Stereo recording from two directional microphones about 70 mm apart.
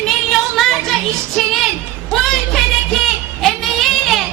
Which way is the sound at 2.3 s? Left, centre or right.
Centre.